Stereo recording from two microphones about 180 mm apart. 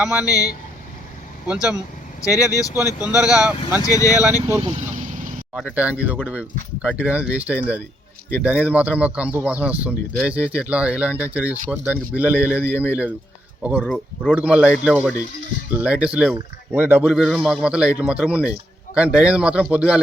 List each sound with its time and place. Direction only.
0.0 s speech: 10° right (ahead or behind)
0.3 s speech: 20° left (ahead or behind)
1.5 s speech: 5° right (ahead or behind)
2.2 s speech: 20° left (ahead or behind)
3.2 s speech: 5° right (ahead or behind)
3.8 s speech: 20° left (ahead or behind)
4.6 s vehicle: 40° right (ahead or behind)
5.5 s speech: 5° right (ahead or behind)